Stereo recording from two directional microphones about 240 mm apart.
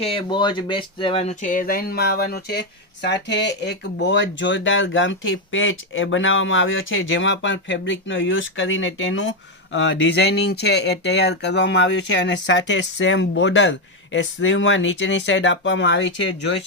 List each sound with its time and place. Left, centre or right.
0.0 s speech: left